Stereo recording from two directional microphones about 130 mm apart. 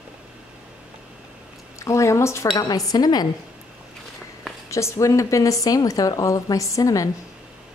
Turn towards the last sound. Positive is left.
turn(degrees=25)  # may be behind; listen again after turning